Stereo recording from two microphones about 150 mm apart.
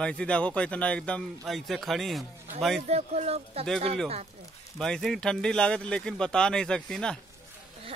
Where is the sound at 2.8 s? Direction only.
45° right (ahead or behind).